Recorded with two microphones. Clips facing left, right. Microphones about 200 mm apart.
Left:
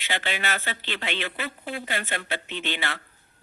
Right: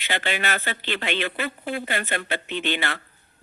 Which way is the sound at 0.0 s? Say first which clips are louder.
Right 3 dB; 55° right (ahead or behind).